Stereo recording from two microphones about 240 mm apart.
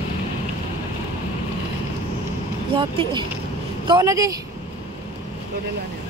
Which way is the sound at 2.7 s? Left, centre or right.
Right.